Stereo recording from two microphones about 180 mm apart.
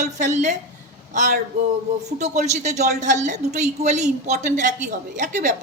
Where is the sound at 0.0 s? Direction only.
40° right (ahead or behind).